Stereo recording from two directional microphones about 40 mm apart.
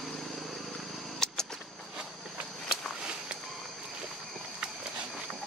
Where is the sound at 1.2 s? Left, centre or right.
Centre.